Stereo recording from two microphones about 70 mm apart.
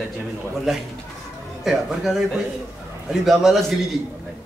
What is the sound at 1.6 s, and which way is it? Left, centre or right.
Speech, centre.